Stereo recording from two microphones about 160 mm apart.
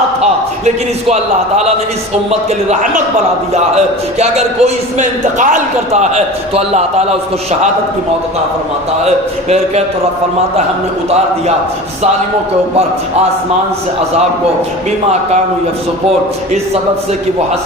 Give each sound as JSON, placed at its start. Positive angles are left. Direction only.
{"t": 3.5, "sound": "speech", "side_deg": -40}
{"t": 9.0, "sound": "speech", "side_deg": -45}